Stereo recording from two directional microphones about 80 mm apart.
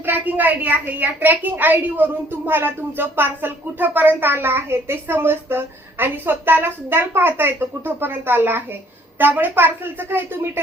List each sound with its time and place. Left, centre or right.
0.0 s speech: right